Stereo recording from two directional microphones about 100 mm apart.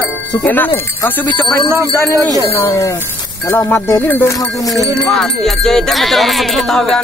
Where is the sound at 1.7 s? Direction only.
25° right (ahead or behind).